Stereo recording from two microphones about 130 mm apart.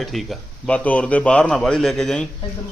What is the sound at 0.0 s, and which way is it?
A man's voice, centre (ahead or behind).